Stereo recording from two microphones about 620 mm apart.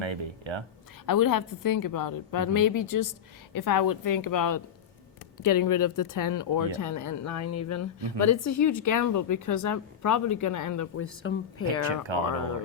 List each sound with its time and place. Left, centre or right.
0.0 s speech: right
1.0 s a woman's voice: left
11.9 s speech: right